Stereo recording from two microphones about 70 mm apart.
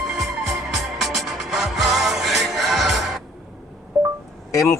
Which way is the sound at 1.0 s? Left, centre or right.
Centre.